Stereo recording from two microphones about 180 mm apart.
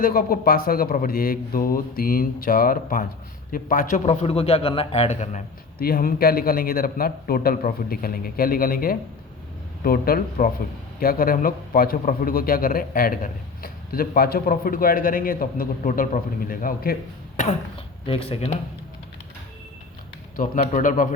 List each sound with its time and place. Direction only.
0.0 s a man's voice: 55° left (ahead or behind); by 5.4 s 40° left (ahead or behind)
5.8 s a man's voice: 55° left (ahead or behind)
18.0 s a man's voice: 30° left (ahead or behind)
20.3 s a man's voice: 50° left (ahead or behind)